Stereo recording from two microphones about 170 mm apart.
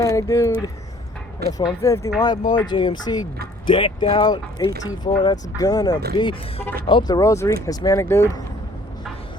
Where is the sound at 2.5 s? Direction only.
30° left (ahead or behind).